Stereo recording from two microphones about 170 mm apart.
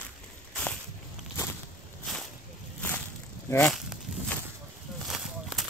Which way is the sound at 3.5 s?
5° left (ahead or behind).